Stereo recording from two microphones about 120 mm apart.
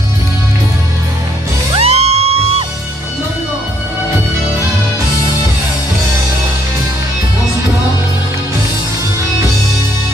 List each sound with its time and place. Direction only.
1.8 s music: 60° right (ahead or behind)